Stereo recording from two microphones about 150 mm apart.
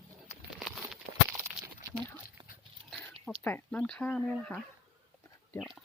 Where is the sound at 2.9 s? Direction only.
Centre (ahead or behind).